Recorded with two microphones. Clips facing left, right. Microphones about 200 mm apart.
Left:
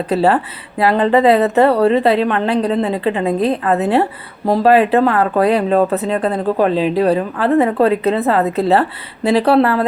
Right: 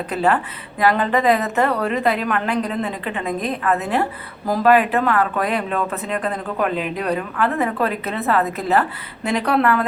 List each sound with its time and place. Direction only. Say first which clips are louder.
0.1 s speech: left 5 dB; 35° left (ahead or behind)